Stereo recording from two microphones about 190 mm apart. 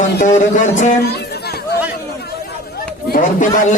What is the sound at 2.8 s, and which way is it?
Speech, 45° left (ahead or behind).